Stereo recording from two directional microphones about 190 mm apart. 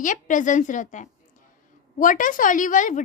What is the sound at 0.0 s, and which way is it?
A woman's voice, 45° left (ahead or behind).